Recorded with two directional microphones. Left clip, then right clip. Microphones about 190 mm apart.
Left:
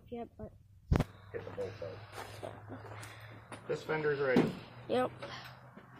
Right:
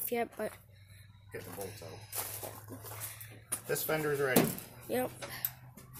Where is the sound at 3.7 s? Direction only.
65° right (ahead or behind).